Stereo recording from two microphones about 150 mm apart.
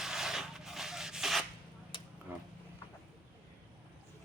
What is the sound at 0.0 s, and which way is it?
Rub, 5° right (ahead or behind).